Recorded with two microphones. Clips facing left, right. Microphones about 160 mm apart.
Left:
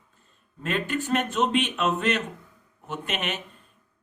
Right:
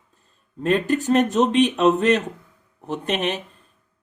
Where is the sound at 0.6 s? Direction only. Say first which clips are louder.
Right 8 dB; 40° right (ahead or behind).